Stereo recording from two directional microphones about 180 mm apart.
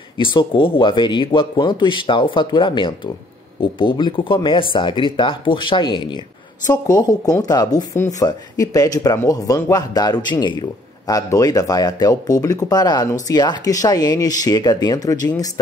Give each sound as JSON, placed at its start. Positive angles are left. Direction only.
{"t": 0.2, "sound": "speech", "side_deg": 25}